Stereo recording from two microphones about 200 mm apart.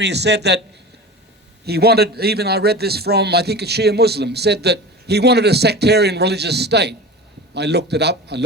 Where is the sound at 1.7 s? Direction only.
55° right (ahead or behind).